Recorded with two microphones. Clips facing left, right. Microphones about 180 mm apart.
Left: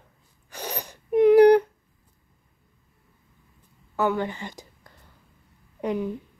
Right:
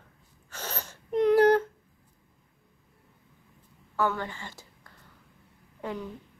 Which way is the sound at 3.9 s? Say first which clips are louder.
Left 4 dB; 15° left (ahead or behind).